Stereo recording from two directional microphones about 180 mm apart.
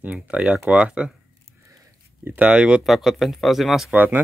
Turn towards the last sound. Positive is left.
turn(degrees=-10)  # may be behind; listen again after turning